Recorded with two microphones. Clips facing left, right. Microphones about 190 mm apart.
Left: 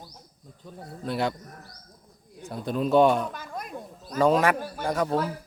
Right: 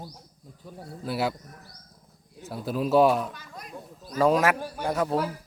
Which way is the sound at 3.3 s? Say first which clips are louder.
Left 6 dB; 50° left (ahead or behind).